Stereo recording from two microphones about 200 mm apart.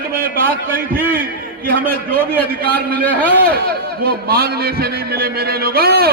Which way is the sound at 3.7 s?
50° right (ahead or behind).